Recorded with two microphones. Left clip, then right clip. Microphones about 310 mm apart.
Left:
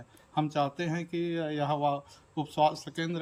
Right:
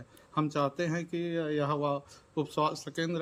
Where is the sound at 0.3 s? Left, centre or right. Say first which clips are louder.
Left 1 dB; centre.